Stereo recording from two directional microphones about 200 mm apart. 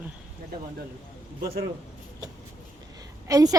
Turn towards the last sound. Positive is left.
turn(degrees=-15)  # may be behind; listen again after turning